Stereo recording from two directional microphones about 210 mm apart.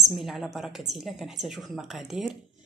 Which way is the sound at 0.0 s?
Centre (ahead or behind).